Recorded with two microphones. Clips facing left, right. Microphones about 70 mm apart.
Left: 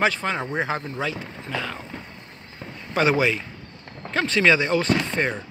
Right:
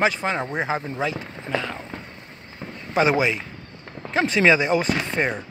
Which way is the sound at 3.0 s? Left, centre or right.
Centre.